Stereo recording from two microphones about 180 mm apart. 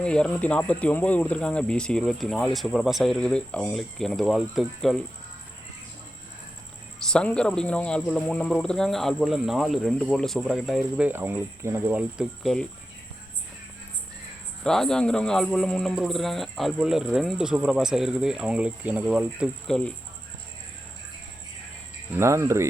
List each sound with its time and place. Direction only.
0.0 s speech: 5° left (ahead or behind)
7.1 s speech: 5° left (ahead or behind)
14.6 s speech: 5° left (ahead or behind)
22.2 s speech: 15° right (ahead or behind)